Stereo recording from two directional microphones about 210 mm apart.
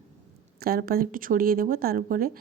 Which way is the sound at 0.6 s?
45° right (ahead or behind).